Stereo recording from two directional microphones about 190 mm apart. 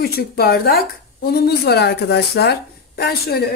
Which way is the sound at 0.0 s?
55° left (ahead or behind).